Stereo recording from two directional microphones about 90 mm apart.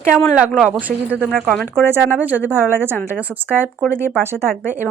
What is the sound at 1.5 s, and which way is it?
Speech, 5° left (ahead or behind).